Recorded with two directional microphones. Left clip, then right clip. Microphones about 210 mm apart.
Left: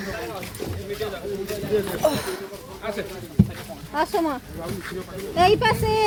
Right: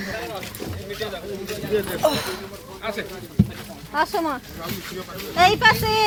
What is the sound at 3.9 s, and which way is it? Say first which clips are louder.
Speech: right 1 dB; 20° left (ahead or behind).